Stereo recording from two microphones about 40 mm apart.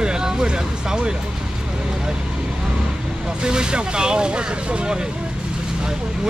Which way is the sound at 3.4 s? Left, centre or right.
Right.